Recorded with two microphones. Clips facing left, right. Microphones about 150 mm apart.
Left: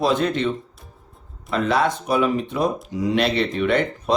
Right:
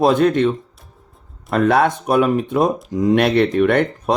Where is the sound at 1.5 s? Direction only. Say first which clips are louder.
Right 5 dB; 55° right (ahead or behind).